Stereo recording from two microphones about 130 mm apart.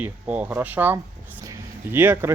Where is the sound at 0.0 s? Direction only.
15° right (ahead or behind).